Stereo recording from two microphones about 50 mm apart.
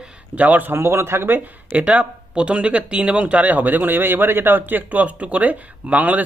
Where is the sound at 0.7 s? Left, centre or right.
Right.